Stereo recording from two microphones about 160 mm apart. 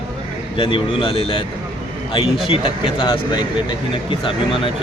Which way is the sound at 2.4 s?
35° left (ahead or behind).